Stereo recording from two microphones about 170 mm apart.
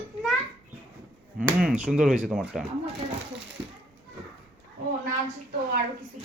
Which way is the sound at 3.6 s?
10° right (ahead or behind).